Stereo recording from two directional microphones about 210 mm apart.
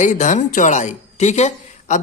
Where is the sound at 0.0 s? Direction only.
35° left (ahead or behind).